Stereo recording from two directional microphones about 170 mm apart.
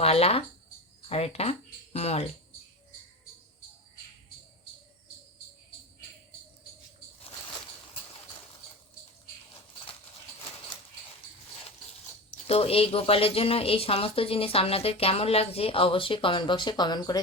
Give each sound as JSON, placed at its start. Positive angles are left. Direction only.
{"t": 0.0, "sound": "speech", "side_deg": 35}
{"t": 12.5, "sound": "speech", "side_deg": 35}